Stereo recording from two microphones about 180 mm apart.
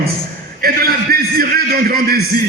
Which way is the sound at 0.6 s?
55° right (ahead or behind).